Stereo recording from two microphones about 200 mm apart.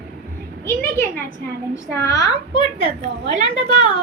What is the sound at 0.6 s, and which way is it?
A woman's voice, 10° left (ahead or behind).